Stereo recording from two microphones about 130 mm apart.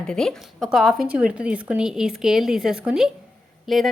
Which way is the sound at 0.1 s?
5° left (ahead or behind).